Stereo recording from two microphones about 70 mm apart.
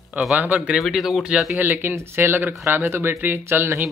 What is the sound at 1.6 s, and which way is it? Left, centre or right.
Speech, right.